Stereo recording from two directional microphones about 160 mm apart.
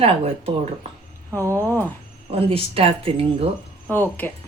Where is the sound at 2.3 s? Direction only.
35° right (ahead or behind).